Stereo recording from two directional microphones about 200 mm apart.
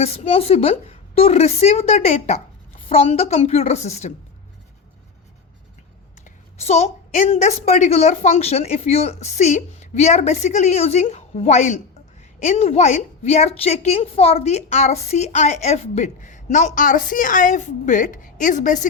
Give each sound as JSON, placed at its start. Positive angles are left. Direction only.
{"t": 0.0, "sound": "a woman's voice", "side_deg": 30}
{"t": 6.6, "sound": "a woman's voice", "side_deg": 35}